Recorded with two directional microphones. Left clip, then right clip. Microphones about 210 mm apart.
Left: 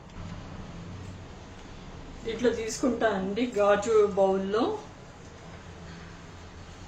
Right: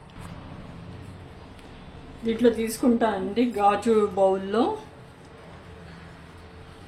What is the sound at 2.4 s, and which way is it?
Speech, 50° right (ahead or behind).